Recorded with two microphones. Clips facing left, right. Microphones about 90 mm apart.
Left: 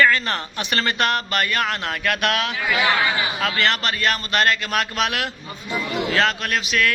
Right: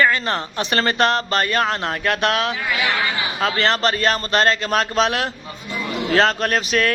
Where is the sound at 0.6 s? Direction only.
35° right (ahead or behind).